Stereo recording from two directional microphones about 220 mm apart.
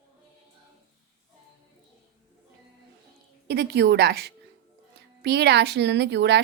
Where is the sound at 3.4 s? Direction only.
45° right (ahead or behind).